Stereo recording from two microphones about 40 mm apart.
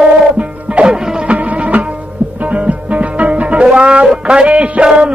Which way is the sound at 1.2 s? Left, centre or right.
Right.